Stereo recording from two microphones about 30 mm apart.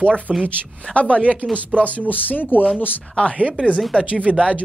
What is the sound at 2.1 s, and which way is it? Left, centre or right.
Speech, left.